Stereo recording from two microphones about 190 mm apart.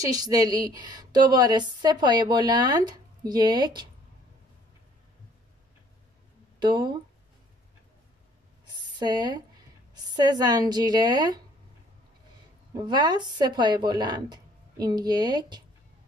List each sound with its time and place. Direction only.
0.0 s a woman's voice: 20° right (ahead or behind)
6.6 s a woman's voice: 25° right (ahead or behind)
8.6 s a sound: 20° right (ahead or behind)
9.9 s a woman's voice: 20° right (ahead or behind)
12.8 s a woman's voice: 25° right (ahead or behind)